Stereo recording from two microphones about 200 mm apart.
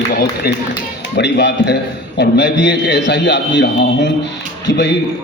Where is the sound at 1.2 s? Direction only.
55° left (ahead or behind).